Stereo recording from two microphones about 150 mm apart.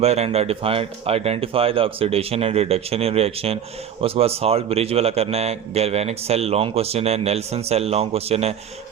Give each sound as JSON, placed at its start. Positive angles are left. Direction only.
{"t": 0.0, "sound": "a man's voice", "side_deg": -45}